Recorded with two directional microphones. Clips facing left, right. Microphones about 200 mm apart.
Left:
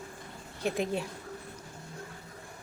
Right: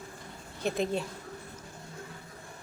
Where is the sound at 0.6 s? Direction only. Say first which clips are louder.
Right 1 dB; 10° left (ahead or behind).